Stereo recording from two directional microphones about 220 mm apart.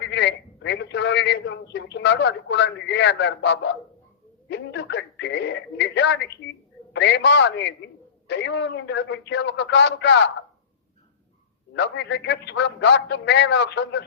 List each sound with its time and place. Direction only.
0.0 s a man's voice: 50° left (ahead or behind)
11.7 s a man's voice: 50° left (ahead or behind)